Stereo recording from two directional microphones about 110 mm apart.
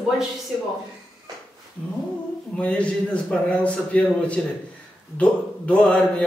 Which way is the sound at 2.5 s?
10° left (ahead or behind).